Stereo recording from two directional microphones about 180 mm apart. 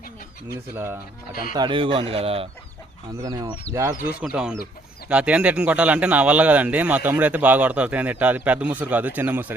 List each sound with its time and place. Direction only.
0.4 s speech: 15° right (ahead or behind)
1.5 s speech: 25° right (ahead or behind)
3.2 s speech: 20° right (ahead or behind)
4.0 s speech: 5° right (ahead or behind)